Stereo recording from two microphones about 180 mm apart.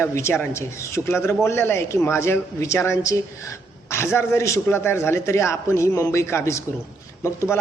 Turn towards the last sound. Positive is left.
turn(degrees=15)  # may be behind; listen again after turning